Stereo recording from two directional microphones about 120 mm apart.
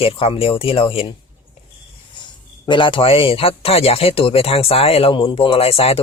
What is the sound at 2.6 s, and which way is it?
Speech, 45° left (ahead or behind).